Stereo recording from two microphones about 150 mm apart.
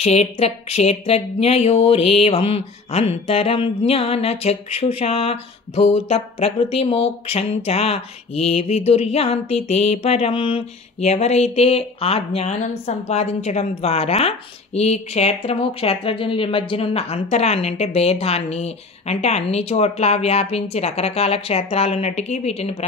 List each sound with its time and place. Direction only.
0.0 s speech: 45° left (ahead or behind)